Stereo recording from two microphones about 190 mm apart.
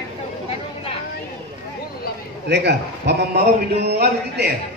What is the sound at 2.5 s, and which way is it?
A man's voice, 65° right (ahead or behind).